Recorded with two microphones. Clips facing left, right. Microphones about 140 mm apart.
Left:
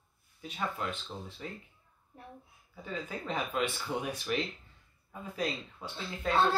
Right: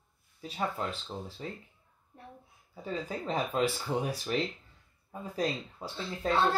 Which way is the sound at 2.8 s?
35° right (ahead or behind).